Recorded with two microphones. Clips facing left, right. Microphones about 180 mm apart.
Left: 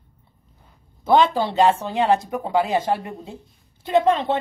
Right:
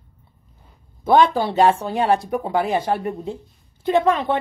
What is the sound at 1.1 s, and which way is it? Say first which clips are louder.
A woman's voice: right 1 dB; 20° left (ahead or behind).